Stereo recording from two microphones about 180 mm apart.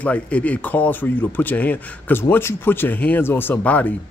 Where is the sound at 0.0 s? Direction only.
10° left (ahead or behind).